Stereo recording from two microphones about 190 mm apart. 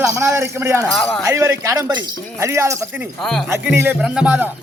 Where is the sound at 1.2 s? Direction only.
15° right (ahead or behind).